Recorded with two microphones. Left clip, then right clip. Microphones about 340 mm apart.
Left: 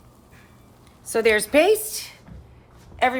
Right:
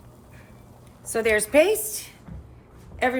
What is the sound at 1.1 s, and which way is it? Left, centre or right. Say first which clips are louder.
A woman's voice: left 3 dB; left.